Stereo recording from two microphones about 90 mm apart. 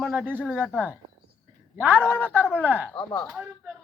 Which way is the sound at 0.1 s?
15° right (ahead or behind).